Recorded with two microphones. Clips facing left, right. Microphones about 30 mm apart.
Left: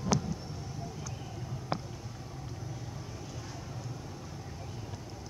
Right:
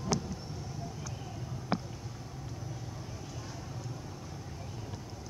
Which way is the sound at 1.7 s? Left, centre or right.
Centre.